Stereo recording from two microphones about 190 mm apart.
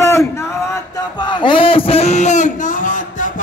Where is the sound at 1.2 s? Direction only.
25° left (ahead or behind).